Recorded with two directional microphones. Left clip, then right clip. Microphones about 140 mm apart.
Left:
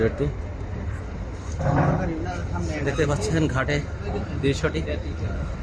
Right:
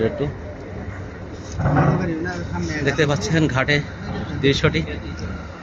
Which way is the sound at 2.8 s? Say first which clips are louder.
Right 4 dB; 10° right (ahead or behind).